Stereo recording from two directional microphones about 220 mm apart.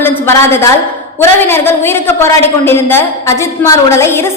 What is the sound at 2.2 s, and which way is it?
A woman's voice, 10° left (ahead or behind).